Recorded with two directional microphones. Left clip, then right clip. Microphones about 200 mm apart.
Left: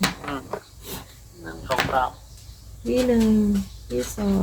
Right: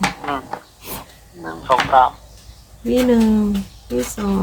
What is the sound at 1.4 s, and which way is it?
Speech, 25° right (ahead or behind).